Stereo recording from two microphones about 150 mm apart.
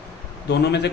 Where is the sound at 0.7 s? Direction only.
90° left.